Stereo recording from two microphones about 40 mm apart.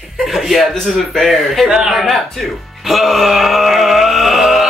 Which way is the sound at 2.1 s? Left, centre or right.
Centre.